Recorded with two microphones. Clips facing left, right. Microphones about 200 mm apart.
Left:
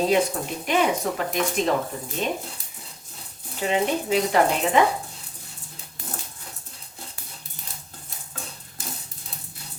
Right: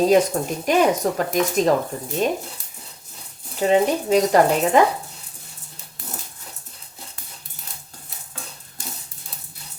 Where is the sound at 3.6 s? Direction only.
40° right (ahead or behind).